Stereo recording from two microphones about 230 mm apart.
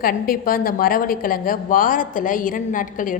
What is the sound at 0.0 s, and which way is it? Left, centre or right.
A woman's voice, left.